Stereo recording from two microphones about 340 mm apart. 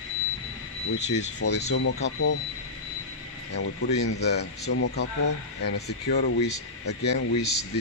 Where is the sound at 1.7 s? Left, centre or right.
Left.